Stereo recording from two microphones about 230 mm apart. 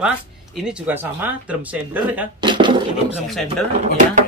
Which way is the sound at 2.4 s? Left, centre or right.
Right.